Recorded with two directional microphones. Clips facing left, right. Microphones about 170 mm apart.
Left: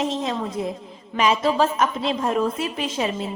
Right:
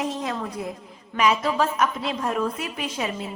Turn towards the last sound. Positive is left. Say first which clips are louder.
# left 4 dB
turn(degrees=25)  # may be behind; listen again after turning